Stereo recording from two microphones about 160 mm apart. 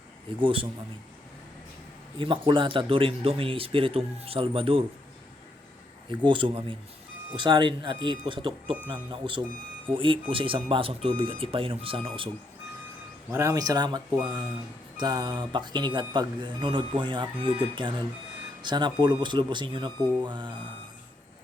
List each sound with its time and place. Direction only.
0.4 s speech: 35° right (ahead or behind)
2.1 s speech: 30° right (ahead or behind)
6.1 s speech: 30° right (ahead or behind)
13.3 s speech: 20° right (ahead or behind)